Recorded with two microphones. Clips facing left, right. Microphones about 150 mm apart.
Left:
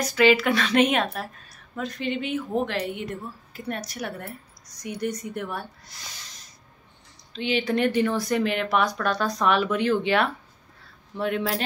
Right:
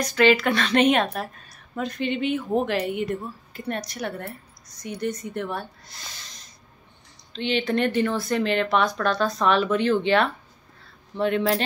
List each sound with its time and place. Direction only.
0.0 s a woman's voice: 5° left (ahead or behind)